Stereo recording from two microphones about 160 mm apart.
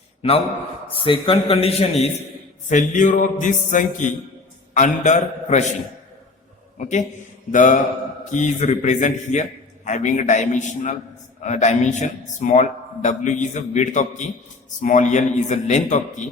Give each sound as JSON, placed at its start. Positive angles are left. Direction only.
{"t": 0.2, "sound": "a man's voice", "side_deg": 35}
{"t": 2.6, "sound": "a man's voice", "side_deg": 50}
{"t": 6.7, "sound": "a man's voice", "side_deg": 50}